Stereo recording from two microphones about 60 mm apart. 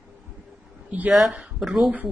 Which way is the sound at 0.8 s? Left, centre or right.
Right.